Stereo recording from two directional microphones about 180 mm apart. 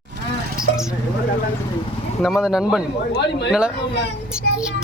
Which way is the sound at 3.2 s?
70° left (ahead or behind).